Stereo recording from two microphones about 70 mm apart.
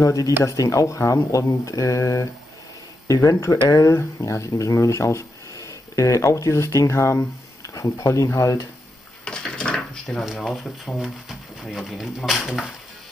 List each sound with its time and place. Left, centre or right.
0.0 s speech: left
3.3 s speech: left
9.2 s drawer open or close: centre
10.2 s speech: centre